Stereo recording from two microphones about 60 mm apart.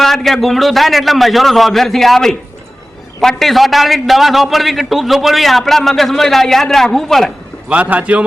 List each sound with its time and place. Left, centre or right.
0.0 s a man's voice: centre
7.7 s a man's voice: right